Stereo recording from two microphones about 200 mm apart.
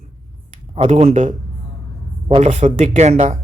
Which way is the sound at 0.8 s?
30° right (ahead or behind).